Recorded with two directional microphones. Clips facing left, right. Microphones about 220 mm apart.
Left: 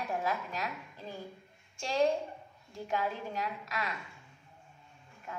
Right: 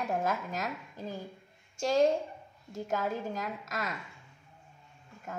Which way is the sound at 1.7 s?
40° right (ahead or behind).